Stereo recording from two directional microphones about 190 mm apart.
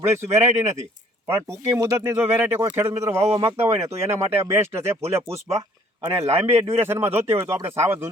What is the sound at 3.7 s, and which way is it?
Speech, 35° right (ahead or behind).